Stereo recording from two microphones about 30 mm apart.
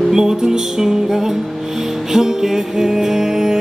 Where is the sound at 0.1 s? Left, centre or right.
Centre.